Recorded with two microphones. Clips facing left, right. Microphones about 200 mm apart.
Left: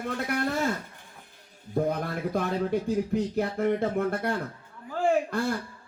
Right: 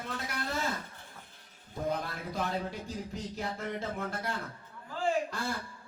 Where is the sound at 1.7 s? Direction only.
55° left (ahead or behind).